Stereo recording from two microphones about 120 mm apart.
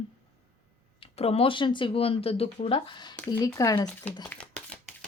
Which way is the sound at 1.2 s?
55° left (ahead or behind).